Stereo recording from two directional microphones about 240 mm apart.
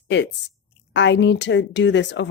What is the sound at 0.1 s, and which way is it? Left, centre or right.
A woman's voice, left.